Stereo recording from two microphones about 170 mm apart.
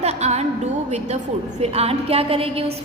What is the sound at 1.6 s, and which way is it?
A woman's voice, 35° right (ahead or behind).